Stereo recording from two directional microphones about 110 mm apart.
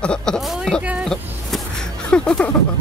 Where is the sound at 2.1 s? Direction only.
10° left (ahead or behind).